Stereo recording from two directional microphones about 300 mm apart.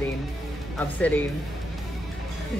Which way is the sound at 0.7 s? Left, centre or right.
Centre.